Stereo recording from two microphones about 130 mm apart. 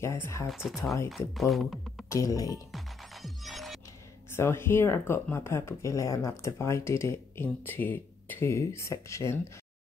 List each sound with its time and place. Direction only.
0.0 s speech: 20° left (ahead or behind)
0.5 s speech: 5° right (ahead or behind)
2.0 s speech: 25° left (ahead or behind)
2.7 s music: centre (ahead or behind)
4.3 s speech: 20° left (ahead or behind)